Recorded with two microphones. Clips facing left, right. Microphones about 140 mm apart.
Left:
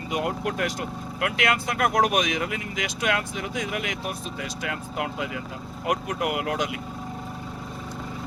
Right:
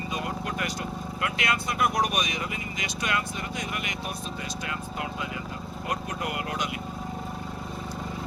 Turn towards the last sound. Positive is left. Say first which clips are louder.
# left 5 dB
turn(degrees=90)